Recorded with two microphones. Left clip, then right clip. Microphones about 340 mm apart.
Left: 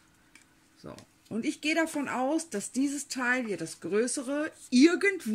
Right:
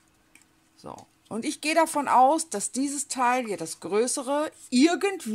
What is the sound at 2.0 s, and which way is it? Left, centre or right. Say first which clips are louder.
Speech: right 12 dB; right.